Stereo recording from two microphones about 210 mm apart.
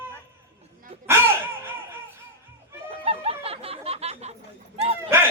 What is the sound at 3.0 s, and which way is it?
Music, 30° right (ahead or behind).